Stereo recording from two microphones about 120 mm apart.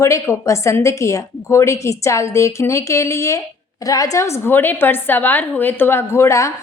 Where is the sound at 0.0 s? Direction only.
25° left (ahead or behind).